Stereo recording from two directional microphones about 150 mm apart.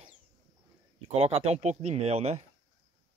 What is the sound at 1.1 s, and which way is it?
Speech, 40° right (ahead or behind).